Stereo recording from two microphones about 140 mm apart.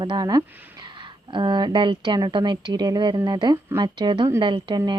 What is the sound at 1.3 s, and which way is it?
Speech, 35° right (ahead or behind).